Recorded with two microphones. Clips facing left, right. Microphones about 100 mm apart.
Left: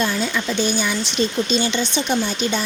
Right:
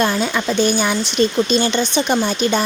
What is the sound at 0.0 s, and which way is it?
Speech, 55° right (ahead or behind).